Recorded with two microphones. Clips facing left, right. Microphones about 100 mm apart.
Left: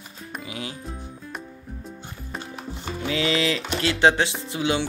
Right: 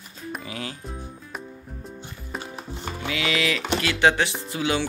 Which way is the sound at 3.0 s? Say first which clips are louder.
Left 2 dB; 30° left (ahead or behind).